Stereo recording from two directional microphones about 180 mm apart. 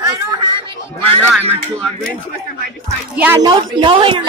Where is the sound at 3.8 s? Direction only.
30° right (ahead or behind).